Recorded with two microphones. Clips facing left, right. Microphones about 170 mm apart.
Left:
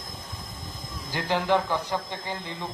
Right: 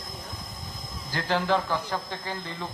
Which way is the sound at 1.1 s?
15° left (ahead or behind).